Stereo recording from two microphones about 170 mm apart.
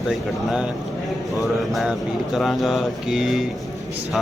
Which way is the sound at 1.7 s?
Centre (ahead or behind).